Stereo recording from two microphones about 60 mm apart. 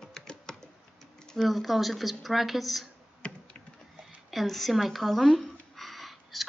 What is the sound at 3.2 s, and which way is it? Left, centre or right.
Computer keyboard, left.